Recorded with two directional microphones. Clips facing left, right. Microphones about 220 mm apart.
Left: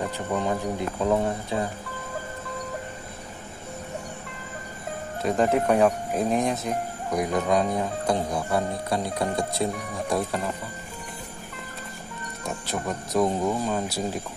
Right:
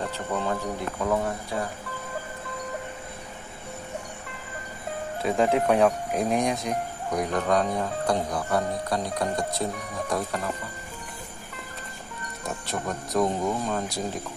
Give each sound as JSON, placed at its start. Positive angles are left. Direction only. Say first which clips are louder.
{"t": 0.0, "sound": "speech", "louder": "left 2 dB", "side_deg": 15}
{"t": 5.2, "sound": "speech", "louder": "left 1 dB", "side_deg": 0}
{"t": 12.4, "sound": "speech", "louder": "left 1 dB", "side_deg": 0}